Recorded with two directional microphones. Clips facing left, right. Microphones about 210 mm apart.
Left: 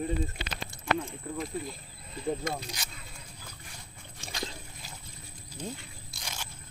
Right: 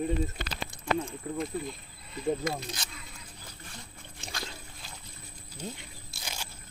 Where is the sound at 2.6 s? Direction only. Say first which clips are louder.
Right 2 dB; 10° left (ahead or behind).